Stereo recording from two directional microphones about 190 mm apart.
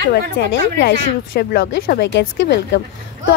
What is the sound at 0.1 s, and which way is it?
Speech, 60° left (ahead or behind).